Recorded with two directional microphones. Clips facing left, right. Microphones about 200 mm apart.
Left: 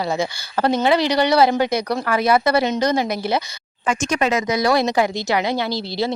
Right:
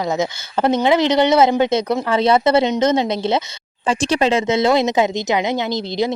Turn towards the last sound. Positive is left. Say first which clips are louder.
# right 3 dB
turn(degrees=-20)  # may be behind; listen again after turning